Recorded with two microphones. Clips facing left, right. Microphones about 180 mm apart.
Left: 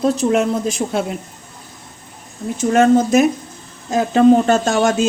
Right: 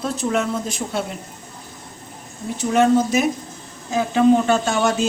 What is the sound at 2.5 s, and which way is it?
A woman's voice, 50° left (ahead or behind).